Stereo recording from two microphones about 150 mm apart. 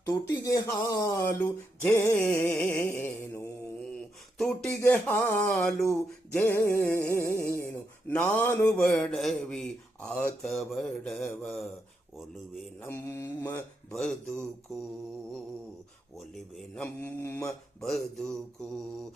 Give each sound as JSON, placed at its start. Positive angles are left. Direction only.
{"t": 0.0, "sound": "speech", "side_deg": 20}
{"t": 4.8, "sound": "speech", "side_deg": 15}
{"t": 12.9, "sound": "speech", "side_deg": 15}
{"t": 16.1, "sound": "speech", "side_deg": 0}